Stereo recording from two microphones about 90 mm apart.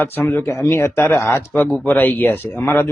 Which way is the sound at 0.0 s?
25° left (ahead or behind).